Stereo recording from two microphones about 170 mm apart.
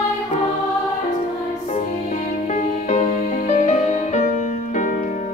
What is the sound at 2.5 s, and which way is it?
Music, 45° left (ahead or behind).